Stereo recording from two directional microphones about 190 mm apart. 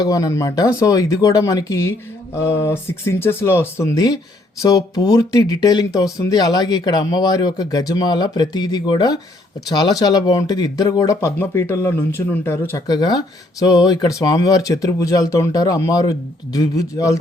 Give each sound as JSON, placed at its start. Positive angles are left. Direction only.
{"t": 0.0, "sound": "speech", "side_deg": 20}